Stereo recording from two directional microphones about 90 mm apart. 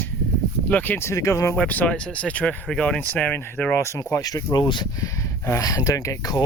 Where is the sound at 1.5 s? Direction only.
15° left (ahead or behind).